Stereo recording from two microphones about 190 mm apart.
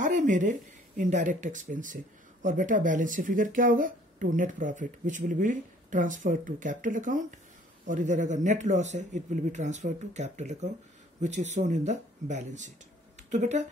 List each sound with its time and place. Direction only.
0.0 s speech: 40° right (ahead or behind)